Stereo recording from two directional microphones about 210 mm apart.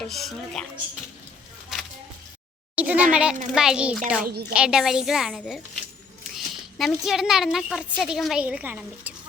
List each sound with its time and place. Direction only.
0.0 s speech: centre (ahead or behind)
1.7 s a sound: centre (ahead or behind)
2.7 s a child's voice: 5° right (ahead or behind)
4.2 s a woman's voice: 45° right (ahead or behind)
4.5 s speech: 5° right (ahead or behind)